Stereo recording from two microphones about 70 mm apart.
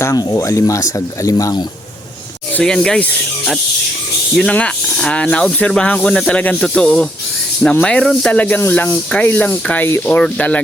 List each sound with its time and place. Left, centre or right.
0.1 s speech: left
2.6 s speech: centre
4.4 s speech: centre
8.3 s speech: left
10.1 s speech: centre